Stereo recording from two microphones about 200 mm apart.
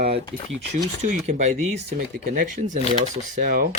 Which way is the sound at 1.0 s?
35° right (ahead or behind).